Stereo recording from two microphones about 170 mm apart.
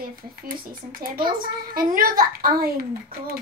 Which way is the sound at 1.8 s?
55° right (ahead or behind).